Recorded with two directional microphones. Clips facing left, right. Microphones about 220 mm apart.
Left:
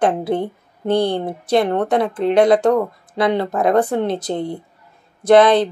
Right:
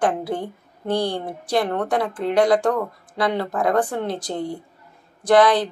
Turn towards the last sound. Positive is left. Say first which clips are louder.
# left 4 dB
turn(degrees=25)  # may be behind; listen again after turning